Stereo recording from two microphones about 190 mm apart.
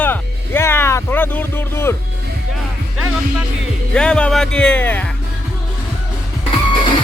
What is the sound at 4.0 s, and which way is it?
Speech, 5° left (ahead or behind).